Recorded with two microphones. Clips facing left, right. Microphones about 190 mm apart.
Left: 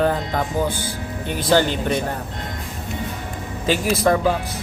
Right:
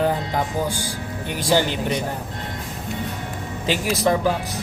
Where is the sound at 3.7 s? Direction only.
15° right (ahead or behind).